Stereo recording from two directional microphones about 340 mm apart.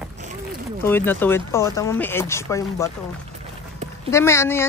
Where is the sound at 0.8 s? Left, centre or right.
Centre.